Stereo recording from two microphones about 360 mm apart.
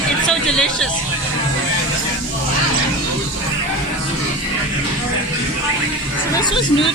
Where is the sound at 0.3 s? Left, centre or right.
Centre.